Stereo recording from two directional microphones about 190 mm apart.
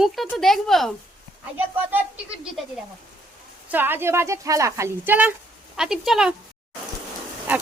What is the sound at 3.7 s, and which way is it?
A woman's voice, 10° right (ahead or behind).